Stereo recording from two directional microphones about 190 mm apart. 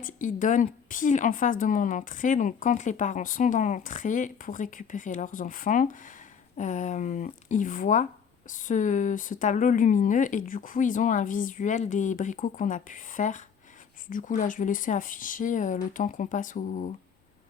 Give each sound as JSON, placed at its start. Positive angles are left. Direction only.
{"t": 0.0, "sound": "speech", "side_deg": 45}